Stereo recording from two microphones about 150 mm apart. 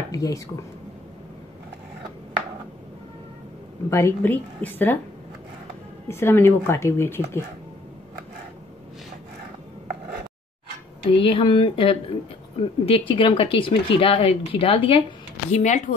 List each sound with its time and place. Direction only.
0.1 s speech: 25° left (ahead or behind)
3.9 s speech: 15° left (ahead or behind)
6.0 s speech: 15° left (ahead or behind)
11.1 s speech: 35° left (ahead or behind)
15.5 s speech: 50° left (ahead or behind)